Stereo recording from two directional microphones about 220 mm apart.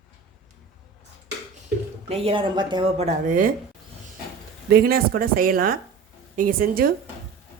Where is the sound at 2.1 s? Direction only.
25° right (ahead or behind).